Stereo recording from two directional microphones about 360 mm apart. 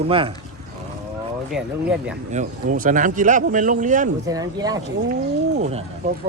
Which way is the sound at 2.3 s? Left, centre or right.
Right.